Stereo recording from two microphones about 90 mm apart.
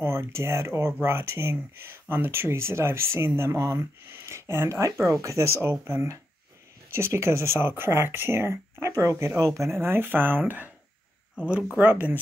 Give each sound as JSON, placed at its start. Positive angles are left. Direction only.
{"t": 0.0, "sound": "speech", "side_deg": -30}
{"t": 11.8, "sound": "speech", "side_deg": -20}